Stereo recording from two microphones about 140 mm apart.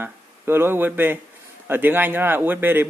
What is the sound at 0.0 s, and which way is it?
Speech, 15° right (ahead or behind).